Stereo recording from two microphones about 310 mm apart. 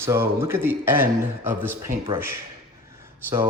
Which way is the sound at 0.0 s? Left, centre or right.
Centre.